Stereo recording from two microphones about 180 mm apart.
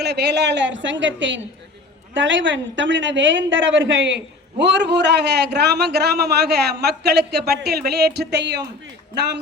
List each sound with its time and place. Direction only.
0.0 s a woman's voice: 70° right (ahead or behind); by 4.2 s 85° right
4.6 s a man's voice: 70° right (ahead or behind)